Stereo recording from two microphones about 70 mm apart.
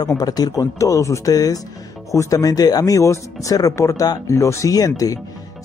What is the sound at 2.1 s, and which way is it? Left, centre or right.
Speech, left.